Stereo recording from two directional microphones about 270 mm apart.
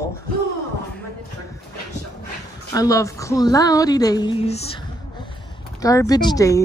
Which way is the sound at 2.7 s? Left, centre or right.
Centre.